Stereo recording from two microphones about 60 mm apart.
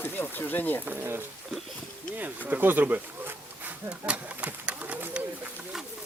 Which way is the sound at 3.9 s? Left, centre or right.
Centre.